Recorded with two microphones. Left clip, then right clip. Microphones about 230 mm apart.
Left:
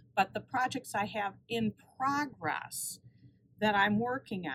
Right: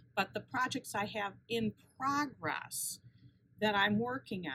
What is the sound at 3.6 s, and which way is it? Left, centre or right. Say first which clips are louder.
Speech: left 3 dB; centre.